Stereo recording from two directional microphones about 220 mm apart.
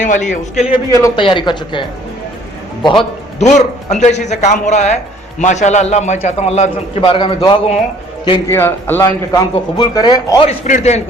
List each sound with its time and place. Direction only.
0.0 s a man's voice: 35° left (ahead or behind)
1.0 s a man's voice: 20° left (ahead or behind)
2.8 s a man's voice: 25° left (ahead or behind)